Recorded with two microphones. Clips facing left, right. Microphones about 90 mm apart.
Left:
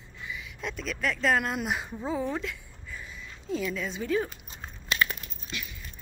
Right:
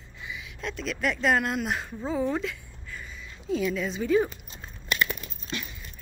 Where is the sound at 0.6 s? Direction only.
5° left (ahead or behind).